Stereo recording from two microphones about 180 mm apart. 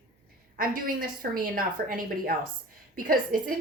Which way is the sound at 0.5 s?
50° right (ahead or behind).